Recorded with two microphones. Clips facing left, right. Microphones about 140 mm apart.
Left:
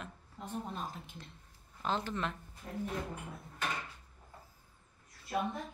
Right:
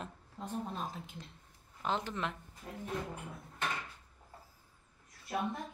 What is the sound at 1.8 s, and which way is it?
Speech, 15° right (ahead or behind).